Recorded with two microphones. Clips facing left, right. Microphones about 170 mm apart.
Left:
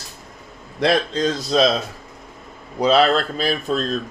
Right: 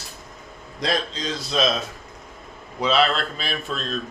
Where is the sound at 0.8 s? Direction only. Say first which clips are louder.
Left 7 dB; 60° left (ahead or behind).